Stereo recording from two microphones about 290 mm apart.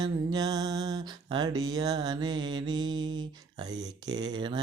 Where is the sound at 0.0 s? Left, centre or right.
Centre.